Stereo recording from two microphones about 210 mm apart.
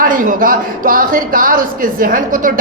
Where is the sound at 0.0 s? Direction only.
40° right (ahead or behind).